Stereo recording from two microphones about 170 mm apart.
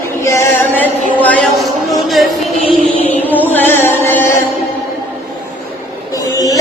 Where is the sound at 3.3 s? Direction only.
10° left (ahead or behind).